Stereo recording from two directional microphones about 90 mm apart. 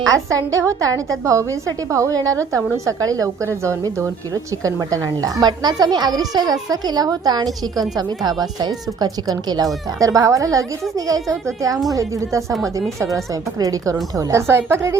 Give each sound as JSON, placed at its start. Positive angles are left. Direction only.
{"t": 0.1, "sound": "a woman's voice", "side_deg": -35}